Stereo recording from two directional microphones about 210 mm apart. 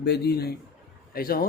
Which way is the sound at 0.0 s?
50° left (ahead or behind).